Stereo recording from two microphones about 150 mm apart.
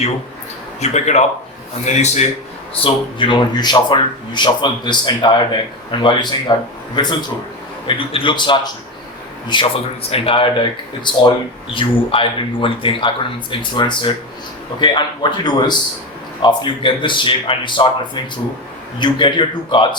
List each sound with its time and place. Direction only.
0.8 s speech: 50° left (ahead or behind)
2.7 s speech: 35° left (ahead or behind)